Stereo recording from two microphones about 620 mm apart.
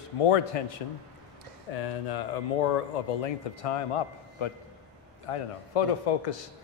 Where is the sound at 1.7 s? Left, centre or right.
Left.